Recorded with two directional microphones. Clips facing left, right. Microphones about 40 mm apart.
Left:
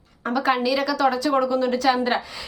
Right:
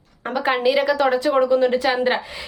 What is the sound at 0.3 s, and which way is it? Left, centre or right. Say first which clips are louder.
Speech: right 3 dB; right.